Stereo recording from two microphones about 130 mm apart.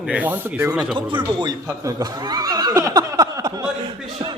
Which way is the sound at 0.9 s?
40° right (ahead or behind).